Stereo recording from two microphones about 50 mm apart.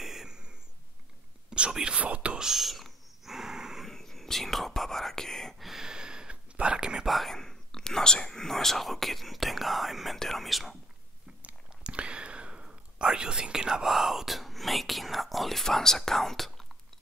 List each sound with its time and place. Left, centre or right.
0.0 s a sound: centre
1.5 s speech: centre
2.3 s whispering: centre
3.8 s whispering: centre
5.6 s a sound: centre
7.1 s whispering: centre
7.3 s speech: centre
11.4 s a sound: right
12.6 s speech: centre